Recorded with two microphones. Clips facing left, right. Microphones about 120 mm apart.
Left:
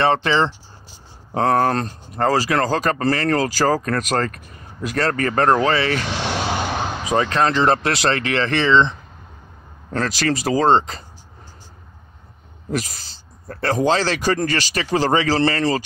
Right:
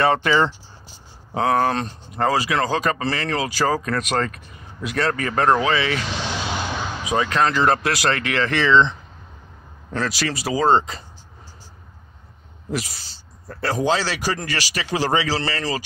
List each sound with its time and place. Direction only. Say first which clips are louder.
0.0 s speech: even; 30° left (ahead or behind)
1.3 s speech: left 2 dB; 45° left (ahead or behind); by 6.9 s 60° left (ahead or behind)
7.0 s speech: left 1 dB; 40° left (ahead or behind)
9.9 s speech: left 3 dB; 45° left (ahead or behind)
13.5 s speech: left 3 dB; 50° left (ahead or behind)